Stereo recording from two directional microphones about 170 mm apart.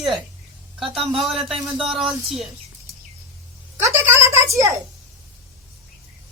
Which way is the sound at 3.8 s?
45° right (ahead or behind).